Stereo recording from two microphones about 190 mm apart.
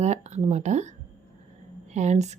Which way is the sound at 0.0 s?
35° right (ahead or behind).